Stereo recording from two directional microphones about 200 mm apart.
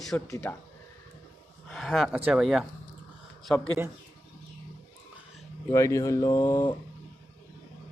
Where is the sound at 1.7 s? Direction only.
Centre (ahead or behind).